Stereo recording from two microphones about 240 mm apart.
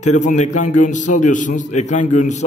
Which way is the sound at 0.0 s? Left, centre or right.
Left.